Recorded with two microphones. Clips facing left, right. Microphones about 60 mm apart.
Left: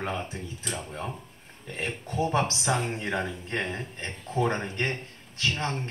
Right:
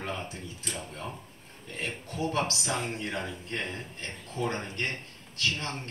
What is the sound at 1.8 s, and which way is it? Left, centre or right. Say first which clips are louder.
Speech: left 4 dB; left.